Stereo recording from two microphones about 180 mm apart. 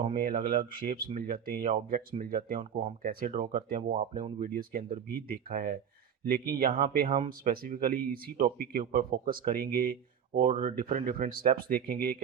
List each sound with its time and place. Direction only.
0.1 s speech: 50° right (ahead or behind)